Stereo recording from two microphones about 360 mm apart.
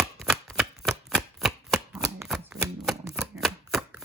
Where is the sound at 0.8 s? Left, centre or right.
Centre.